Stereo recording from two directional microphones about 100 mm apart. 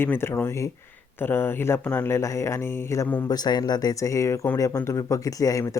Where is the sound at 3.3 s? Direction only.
40° left (ahead or behind).